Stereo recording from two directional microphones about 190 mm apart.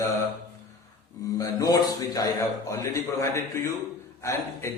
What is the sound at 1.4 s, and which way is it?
A man's voice, 20° left (ahead or behind).